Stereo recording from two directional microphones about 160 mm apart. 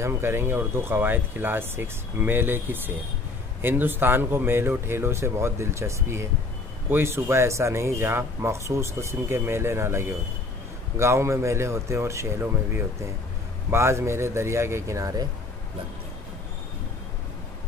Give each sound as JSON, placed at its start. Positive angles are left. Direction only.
{"t": 0.0, "sound": "speech", "side_deg": -15}